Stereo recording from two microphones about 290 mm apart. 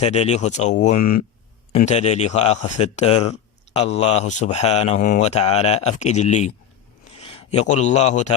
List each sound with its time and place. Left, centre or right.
0.0 s a man's voice: left
0.9 s speech: left
1.7 s a man's voice: left